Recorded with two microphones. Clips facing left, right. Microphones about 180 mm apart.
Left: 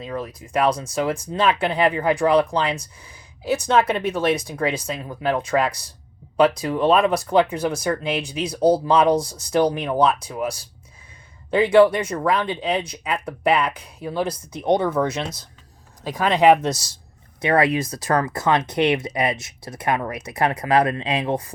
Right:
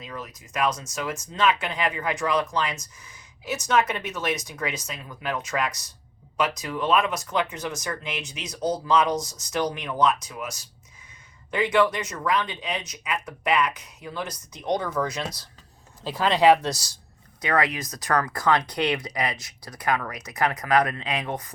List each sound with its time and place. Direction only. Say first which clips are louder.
0.0 s speech: left 8 dB; 30° left (ahead or behind)